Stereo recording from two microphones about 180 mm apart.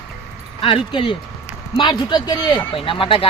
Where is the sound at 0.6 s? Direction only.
30° left (ahead or behind).